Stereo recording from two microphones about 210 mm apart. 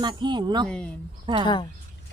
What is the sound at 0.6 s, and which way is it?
Speech, 5° left (ahead or behind).